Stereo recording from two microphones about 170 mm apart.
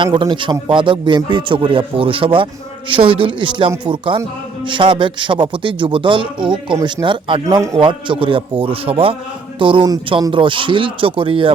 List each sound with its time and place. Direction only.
0.0 s a man's voice: 30° right (ahead or behind)
7.4 s a man's voice: 20° right (ahead or behind)
7.8 s a man's voice: 30° right (ahead or behind)